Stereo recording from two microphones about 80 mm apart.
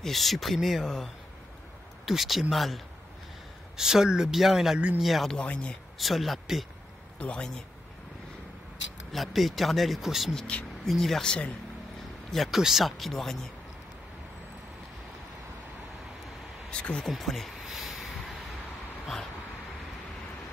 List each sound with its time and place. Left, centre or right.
0.0 s speech: centre
4.7 s speech: centre
5.0 s speech: centre
5.4 s speech: centre
5.9 s speech: centre
7.2 s speech: centre
9.1 s speech: centre
12.3 s speech: centre
16.7 s a sound: centre